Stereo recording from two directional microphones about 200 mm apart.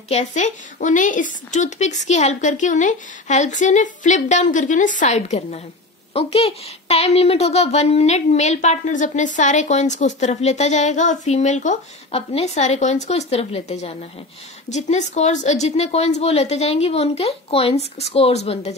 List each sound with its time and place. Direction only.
0.1 s a child's voice: 35° left (ahead or behind)